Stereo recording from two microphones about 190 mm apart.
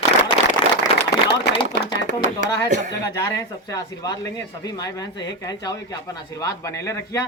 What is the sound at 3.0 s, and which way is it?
A man's voice, 20° left (ahead or behind).